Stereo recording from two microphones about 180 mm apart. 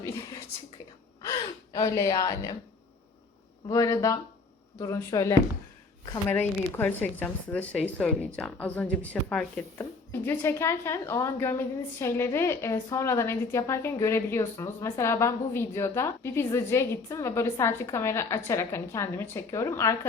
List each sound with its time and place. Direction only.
0.0 s speech: 20° left (ahead or behind)
3.7 s speech: 20° left (ahead or behind)